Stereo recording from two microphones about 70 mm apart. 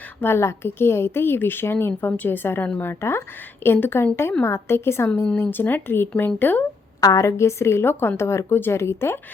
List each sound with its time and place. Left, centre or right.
0.2 s a woman's voice: left
7.0 s a woman's voice: left